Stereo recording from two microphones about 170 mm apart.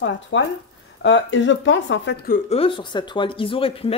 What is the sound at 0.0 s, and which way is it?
Speech, 90° left.